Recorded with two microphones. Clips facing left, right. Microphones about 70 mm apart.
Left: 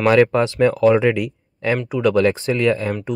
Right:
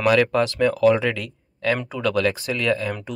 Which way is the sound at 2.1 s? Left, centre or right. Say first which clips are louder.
Left 4 dB; left.